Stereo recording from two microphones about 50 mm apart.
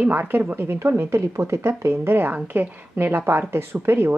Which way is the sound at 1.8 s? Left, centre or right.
Right.